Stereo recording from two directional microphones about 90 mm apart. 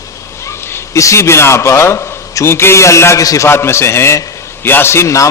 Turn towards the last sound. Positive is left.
turn(degrees=35)  # may be behind; listen again after turning